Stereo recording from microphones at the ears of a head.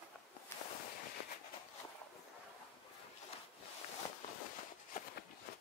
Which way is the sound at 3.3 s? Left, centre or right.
Left.